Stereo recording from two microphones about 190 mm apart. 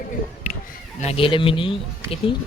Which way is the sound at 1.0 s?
30° left (ahead or behind).